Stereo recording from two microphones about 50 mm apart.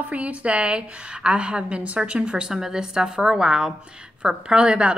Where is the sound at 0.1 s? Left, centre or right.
Right.